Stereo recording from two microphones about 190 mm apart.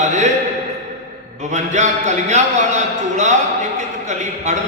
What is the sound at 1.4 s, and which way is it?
A man's voice, 40° right (ahead or behind).